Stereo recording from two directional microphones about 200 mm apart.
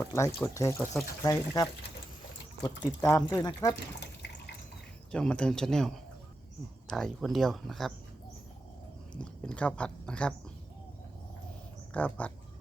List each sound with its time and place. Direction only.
0.0 s speech: 15° left (ahead or behind)
3.0 s speech: 20° left (ahead or behind)
4.0 s water: 60° left (ahead or behind)
5.1 s speech: 5° left (ahead or behind)
9.2 s speech: 5° left (ahead or behind)
11.9 s speech: 5° left (ahead or behind)